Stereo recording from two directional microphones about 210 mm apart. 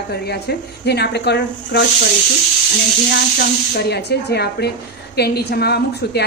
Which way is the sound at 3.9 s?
50° left (ahead or behind).